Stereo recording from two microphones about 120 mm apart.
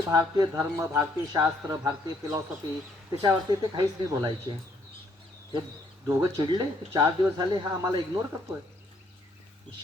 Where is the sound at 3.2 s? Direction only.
30° right (ahead or behind).